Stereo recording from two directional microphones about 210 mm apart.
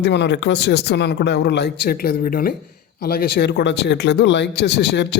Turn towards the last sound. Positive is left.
turn(degrees=55)  # may be behind; listen again after turning